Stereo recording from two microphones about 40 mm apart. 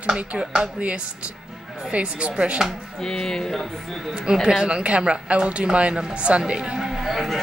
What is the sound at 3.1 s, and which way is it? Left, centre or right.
Speech, centre.